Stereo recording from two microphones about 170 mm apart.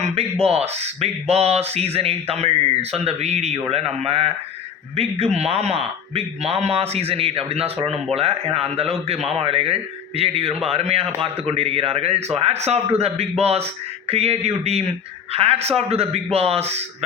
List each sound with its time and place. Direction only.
0.0 s speech: 35° right (ahead or behind)